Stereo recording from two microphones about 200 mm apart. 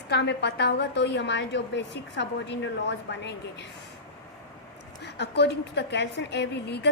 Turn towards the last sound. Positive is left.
turn(degrees=55)  # may be behind; listen again after turning